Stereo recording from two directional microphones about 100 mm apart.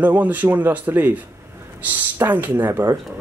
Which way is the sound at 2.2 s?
20° right (ahead or behind).